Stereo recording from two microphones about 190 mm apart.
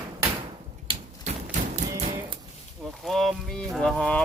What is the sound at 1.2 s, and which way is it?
Horse, 40° right (ahead or behind).